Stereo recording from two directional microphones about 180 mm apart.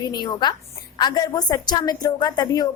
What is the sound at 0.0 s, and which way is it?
A woman's voice, 25° left (ahead or behind).